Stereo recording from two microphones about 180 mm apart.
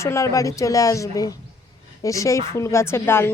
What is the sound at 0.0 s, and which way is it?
A woman's voice, 15° left (ahead or behind).